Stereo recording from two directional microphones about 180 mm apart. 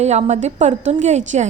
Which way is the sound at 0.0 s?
40° right (ahead or behind).